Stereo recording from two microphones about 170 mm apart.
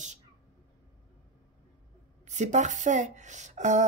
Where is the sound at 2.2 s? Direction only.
45° right (ahead or behind).